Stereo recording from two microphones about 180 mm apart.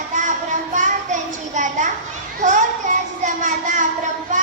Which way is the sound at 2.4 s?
45° right (ahead or behind).